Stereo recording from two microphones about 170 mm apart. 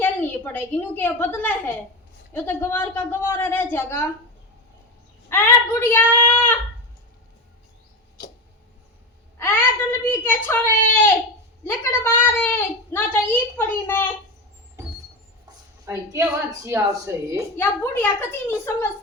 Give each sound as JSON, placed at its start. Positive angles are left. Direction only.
{"t": 0.0, "sound": "a woman's voice", "side_deg": 10}
{"t": 5.3, "sound": "a woman's voice", "side_deg": 15}
{"t": 9.4, "sound": "a woman's voice", "side_deg": 10}
{"t": 15.9, "sound": "a woman's voice", "side_deg": -20}
{"t": 17.6, "sound": "a woman's voice", "side_deg": 10}